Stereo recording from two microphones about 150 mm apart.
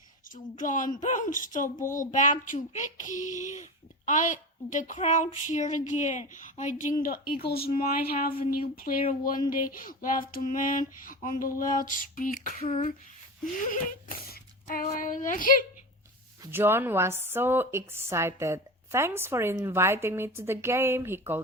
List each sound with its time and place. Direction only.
0.3 s a child's voice: 60° left (ahead or behind)
7.4 s speech: 90° left
8.2 s a child's voice: 75° left (ahead or behind)
14.8 s a child's voice: 65° left (ahead or behind)
16.5 s a woman's voice: 15° right (ahead or behind)